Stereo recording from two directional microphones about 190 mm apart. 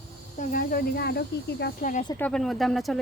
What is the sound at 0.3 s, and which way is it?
Speech, 50° left (ahead or behind).